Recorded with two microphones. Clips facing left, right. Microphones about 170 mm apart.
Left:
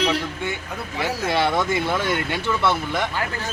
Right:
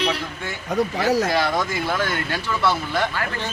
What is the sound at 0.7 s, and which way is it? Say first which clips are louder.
Speech: right 7 dB; 40° right (ahead or behind).